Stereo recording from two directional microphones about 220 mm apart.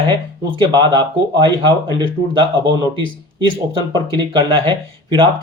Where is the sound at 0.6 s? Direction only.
20° right (ahead or behind).